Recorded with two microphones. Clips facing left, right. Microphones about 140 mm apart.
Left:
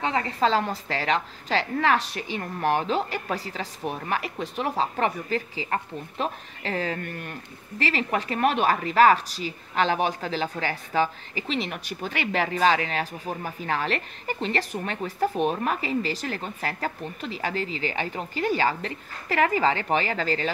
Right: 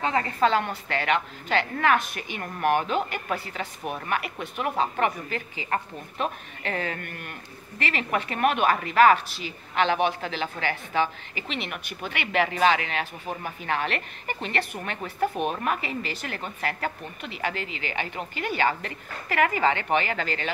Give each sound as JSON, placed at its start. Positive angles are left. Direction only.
{"t": 0.0, "sound": "a woman's voice", "side_deg": 25}